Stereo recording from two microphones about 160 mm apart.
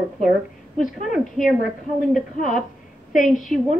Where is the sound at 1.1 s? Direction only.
Centre (ahead or behind).